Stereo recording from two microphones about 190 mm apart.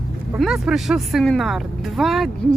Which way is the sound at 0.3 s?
Centre (ahead or behind).